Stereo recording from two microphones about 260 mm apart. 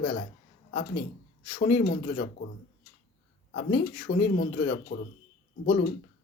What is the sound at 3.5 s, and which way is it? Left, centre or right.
Speech, left.